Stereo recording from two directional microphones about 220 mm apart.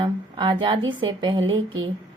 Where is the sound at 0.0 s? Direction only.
20° right (ahead or behind).